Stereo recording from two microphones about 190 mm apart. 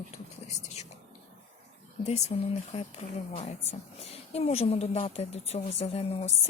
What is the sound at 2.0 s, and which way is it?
A woman's voice, 35° left (ahead or behind).